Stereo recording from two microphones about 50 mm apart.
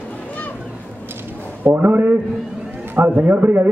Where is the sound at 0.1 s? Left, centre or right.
Left.